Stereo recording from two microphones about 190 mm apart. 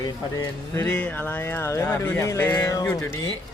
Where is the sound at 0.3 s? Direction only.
15° left (ahead or behind).